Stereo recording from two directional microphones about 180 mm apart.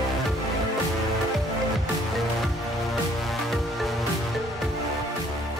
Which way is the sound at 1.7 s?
Centre (ahead or behind).